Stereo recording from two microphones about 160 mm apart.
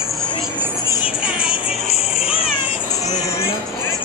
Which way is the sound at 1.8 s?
40° left (ahead or behind).